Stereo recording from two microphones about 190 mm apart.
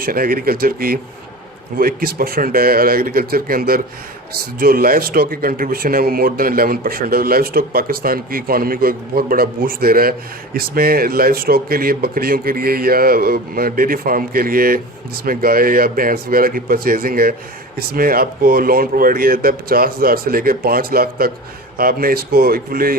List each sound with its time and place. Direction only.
0.0 s speech: 50° right (ahead or behind)